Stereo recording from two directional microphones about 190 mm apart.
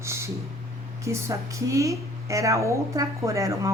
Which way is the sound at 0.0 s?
15° right (ahead or behind).